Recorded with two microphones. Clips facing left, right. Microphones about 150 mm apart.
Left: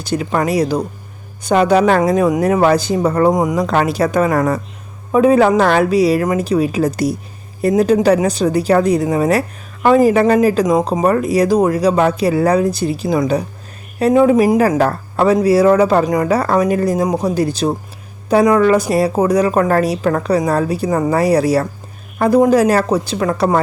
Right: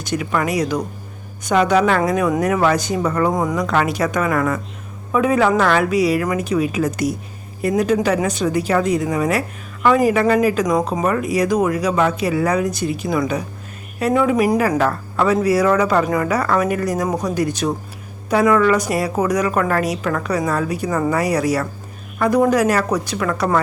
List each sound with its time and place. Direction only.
0.0 s speech: 30° left (ahead or behind)
3.3 s speech: 20° left (ahead or behind)
3.6 s speech: 35° left (ahead or behind)
11.0 s speech: 35° left (ahead or behind)
14.8 s speech: 35° left (ahead or behind)